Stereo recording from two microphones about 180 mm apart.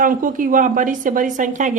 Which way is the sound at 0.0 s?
50° right (ahead or behind).